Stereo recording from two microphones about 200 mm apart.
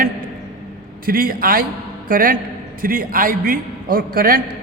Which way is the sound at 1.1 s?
45° right (ahead or behind).